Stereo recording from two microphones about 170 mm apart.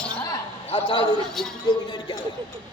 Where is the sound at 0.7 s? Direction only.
30° left (ahead or behind).